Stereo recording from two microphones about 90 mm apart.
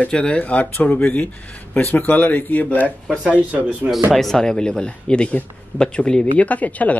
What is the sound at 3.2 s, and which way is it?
Speech, 15° right (ahead or behind).